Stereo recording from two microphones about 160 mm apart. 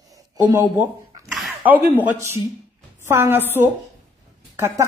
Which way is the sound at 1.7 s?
10° right (ahead or behind).